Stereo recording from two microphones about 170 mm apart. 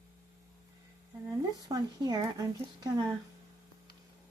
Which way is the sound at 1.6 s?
25° right (ahead or behind).